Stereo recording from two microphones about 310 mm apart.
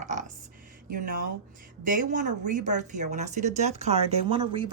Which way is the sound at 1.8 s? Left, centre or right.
Right.